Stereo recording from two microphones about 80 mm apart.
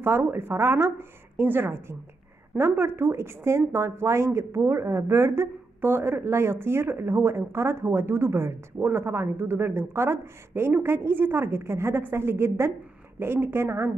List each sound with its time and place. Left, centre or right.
0.0 s speech: right